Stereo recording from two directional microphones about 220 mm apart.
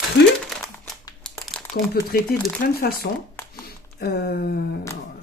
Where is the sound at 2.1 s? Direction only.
40° left (ahead or behind).